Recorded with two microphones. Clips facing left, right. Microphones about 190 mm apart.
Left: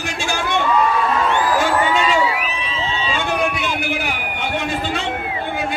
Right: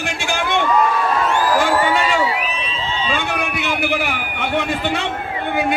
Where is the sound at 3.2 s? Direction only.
60° right (ahead or behind).